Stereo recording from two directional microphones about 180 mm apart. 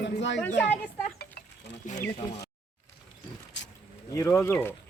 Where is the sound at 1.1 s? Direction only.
60° left (ahead or behind).